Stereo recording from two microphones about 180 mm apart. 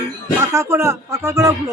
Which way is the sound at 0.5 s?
15° right (ahead or behind).